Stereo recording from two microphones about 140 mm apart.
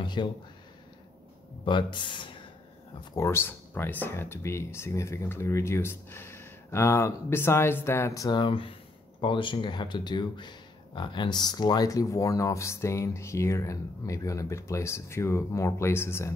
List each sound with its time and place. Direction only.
0.0 s speech: 35° left (ahead or behind)
1.6 s speech: 35° left (ahead or behind)
3.2 s speech: 20° left (ahead or behind)